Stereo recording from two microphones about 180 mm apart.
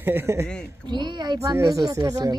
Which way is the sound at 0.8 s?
25° right (ahead or behind).